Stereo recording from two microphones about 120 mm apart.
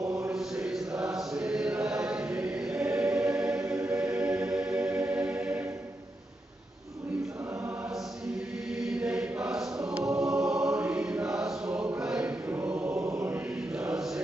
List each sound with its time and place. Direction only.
0.3 s chant: 5° right (ahead or behind)
3.0 s choir: 5° right (ahead or behind)
4.2 s music: 5° right (ahead or behind)
8.7 s choir: 5° right (ahead or behind)
12.9 s chant: 25° right (ahead or behind)